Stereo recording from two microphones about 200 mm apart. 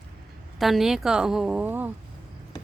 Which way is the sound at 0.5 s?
Centre (ahead or behind).